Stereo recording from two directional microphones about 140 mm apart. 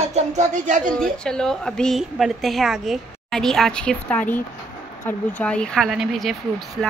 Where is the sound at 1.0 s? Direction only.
5° left (ahead or behind).